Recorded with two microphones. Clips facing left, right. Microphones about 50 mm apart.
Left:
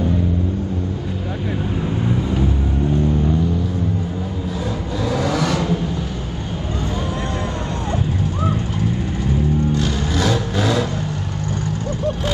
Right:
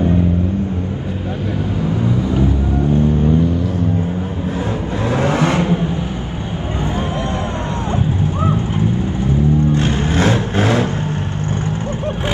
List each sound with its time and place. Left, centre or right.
2.3 s vehicle: right
5.2 s vehicle: right
8.2 s vehicle: right